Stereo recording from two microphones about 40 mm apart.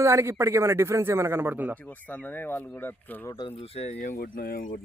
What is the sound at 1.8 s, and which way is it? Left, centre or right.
Speech, left.